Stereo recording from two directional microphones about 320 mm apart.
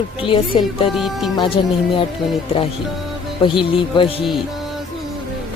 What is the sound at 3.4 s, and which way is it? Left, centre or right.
Speech, centre.